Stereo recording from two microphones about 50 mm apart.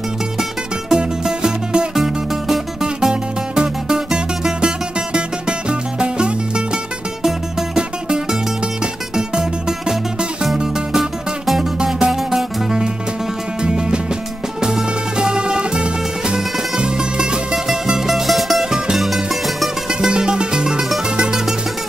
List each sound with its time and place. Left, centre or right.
0.9 s music: centre
2.0 s music: centre
13.6 s music: centre
19.9 s music: centre